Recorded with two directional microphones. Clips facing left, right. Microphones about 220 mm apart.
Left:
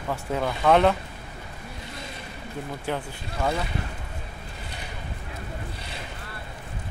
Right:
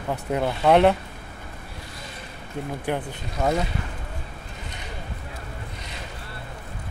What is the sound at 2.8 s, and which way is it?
Speech, 20° right (ahead or behind).